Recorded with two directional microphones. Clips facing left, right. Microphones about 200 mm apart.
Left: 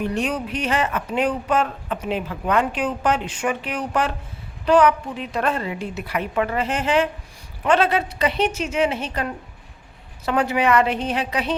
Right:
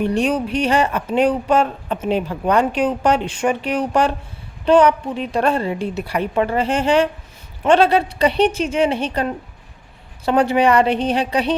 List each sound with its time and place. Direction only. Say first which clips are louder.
0.0 s speech: right 5 dB; 30° right (ahead or behind)